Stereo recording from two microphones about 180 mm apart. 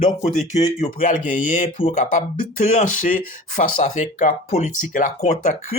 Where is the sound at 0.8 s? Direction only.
45° left (ahead or behind).